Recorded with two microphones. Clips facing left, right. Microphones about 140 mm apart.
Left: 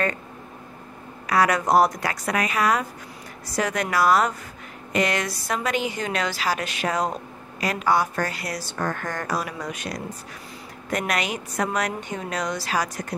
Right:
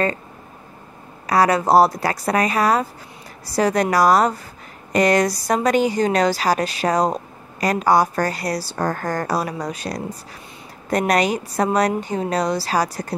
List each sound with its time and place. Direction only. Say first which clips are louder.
1.2 s a woman's voice: right 4 dB; 35° right (ahead or behind)